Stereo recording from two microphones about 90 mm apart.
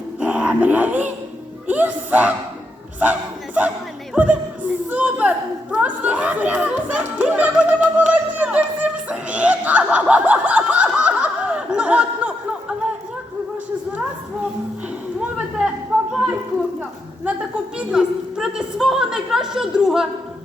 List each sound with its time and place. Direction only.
0.2 s dog: 15° right (ahead or behind)
1.6 s speech: 20° right (ahead or behind)
15.4 s a sound: 10° right (ahead or behind)
17.7 s a woman's voice: 5° right (ahead or behind)